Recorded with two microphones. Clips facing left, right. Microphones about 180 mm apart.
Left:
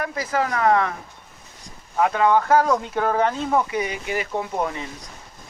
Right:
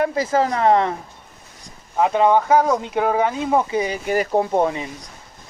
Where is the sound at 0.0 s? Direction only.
25° right (ahead or behind).